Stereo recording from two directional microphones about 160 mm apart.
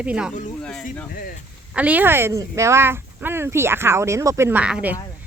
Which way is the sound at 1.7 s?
10° right (ahead or behind).